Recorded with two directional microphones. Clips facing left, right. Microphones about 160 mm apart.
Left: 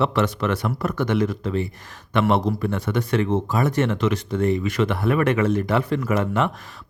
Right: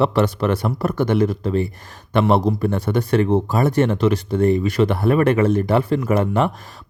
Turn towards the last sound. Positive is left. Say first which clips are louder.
# right 3 dB
turn(degrees=-35)  # may be behind; listen again after turning